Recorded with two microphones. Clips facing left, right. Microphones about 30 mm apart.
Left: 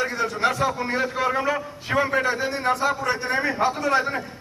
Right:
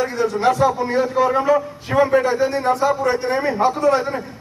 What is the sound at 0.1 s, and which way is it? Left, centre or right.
A man's voice, centre.